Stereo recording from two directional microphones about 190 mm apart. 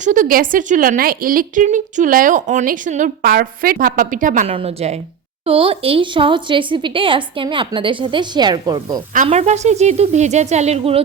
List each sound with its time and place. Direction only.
0.0 s a woman's voice: 45° right (ahead or behind)
4.5 s a woman's voice: 30° right (ahead or behind)
9.1 s a woman's voice: 40° right (ahead or behind)